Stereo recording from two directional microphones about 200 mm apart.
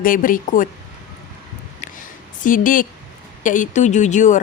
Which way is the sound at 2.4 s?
40° left (ahead or behind).